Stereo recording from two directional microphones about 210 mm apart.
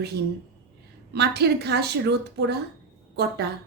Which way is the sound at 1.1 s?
50° right (ahead or behind).